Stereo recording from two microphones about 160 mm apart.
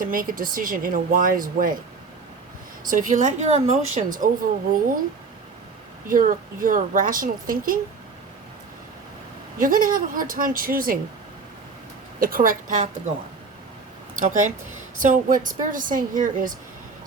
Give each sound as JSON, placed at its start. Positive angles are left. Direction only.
{"t": 0.0, "sound": "speech", "side_deg": -60}
{"t": 2.9, "sound": "speech", "side_deg": -55}
{"t": 6.1, "sound": "speech", "side_deg": -60}
{"t": 9.6, "sound": "speech", "side_deg": -60}
{"t": 12.2, "sound": "speech", "side_deg": -60}
{"t": 14.2, "sound": "speech", "side_deg": -55}